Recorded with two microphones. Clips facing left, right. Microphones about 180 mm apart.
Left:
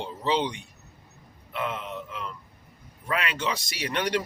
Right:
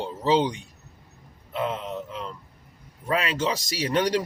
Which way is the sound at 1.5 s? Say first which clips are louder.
Right 3 dB; 35° right (ahead or behind).